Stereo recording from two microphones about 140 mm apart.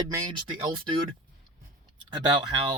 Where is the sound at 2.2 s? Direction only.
30° right (ahead or behind).